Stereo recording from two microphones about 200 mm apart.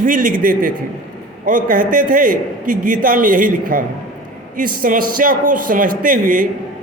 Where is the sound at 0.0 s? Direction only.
45° right (ahead or behind).